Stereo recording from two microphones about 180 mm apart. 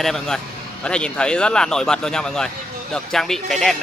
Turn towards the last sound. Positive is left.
turn(degrees=0)  # may be behind; listen again after turning